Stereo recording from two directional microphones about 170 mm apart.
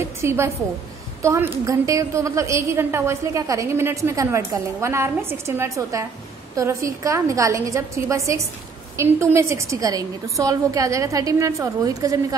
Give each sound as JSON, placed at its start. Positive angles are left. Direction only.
{"t": 0.2, "sound": "a woman's voice", "side_deg": -15}